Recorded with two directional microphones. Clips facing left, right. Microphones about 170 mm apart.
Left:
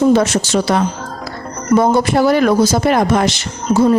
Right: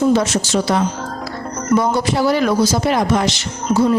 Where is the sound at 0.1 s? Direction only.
60° left (ahead or behind).